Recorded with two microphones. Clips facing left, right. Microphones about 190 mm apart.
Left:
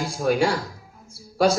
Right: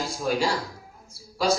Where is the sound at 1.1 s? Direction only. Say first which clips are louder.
Left 5 dB; 55° left (ahead or behind).